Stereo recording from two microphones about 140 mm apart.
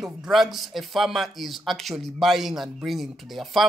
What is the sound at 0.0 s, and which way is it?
Speech, centre (ahead or behind).